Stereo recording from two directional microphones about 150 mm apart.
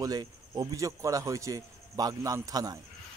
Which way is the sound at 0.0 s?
25° right (ahead or behind).